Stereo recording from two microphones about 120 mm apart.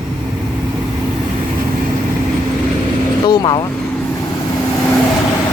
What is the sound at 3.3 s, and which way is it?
Speech, 35° left (ahead or behind).